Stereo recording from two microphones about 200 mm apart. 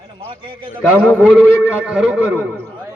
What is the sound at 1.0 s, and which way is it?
Speech, 5° left (ahead or behind).